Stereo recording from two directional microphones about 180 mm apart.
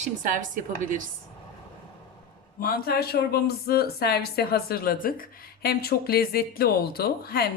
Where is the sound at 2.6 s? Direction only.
55° left (ahead or behind).